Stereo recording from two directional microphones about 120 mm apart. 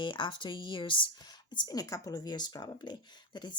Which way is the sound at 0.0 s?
40° left (ahead or behind).